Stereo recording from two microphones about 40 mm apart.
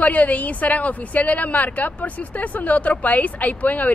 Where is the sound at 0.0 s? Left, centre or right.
Left.